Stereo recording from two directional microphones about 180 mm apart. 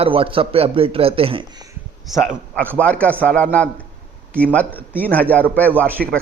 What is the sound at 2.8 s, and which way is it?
A man's voice, 5° left (ahead or behind).